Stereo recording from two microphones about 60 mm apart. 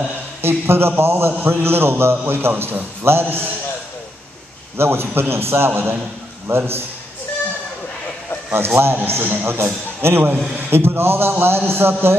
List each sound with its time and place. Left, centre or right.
0.4 s a man's voice: right
4.7 s a man's voice: right
8.5 s a man's voice: right